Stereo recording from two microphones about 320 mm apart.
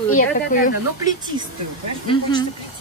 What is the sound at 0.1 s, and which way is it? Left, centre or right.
Speech, left.